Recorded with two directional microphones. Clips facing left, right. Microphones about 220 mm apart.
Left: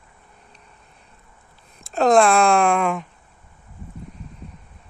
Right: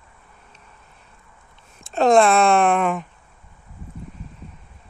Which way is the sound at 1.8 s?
Centre (ahead or behind).